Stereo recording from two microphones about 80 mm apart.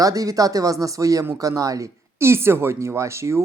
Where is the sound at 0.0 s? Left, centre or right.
Right.